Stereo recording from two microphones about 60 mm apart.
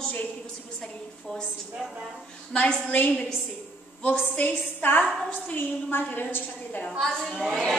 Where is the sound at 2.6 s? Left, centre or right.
Centre.